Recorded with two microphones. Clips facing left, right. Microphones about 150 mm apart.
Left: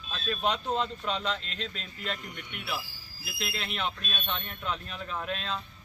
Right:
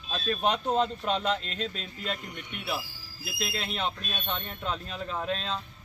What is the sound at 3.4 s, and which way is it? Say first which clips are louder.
Speech: right 2 dB; 35° right (ahead or behind).